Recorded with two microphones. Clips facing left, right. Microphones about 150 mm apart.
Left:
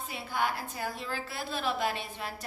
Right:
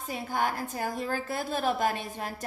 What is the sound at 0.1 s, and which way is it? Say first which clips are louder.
A woman's voice: right 3 dB; 45° right (ahead or behind).